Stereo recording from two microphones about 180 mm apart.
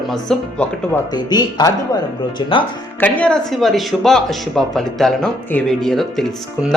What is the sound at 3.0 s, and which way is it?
Speech, 5° left (ahead or behind).